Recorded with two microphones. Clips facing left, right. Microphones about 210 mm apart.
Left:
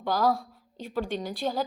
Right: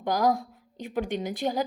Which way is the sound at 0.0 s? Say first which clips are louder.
Right 1 dB; 15° right (ahead or behind).